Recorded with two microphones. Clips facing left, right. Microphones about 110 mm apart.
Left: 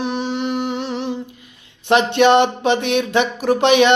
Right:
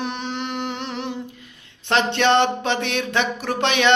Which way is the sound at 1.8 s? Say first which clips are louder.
Left 5 dB; 15° left (ahead or behind).